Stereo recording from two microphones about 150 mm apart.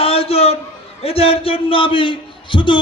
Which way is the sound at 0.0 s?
40° left (ahead or behind).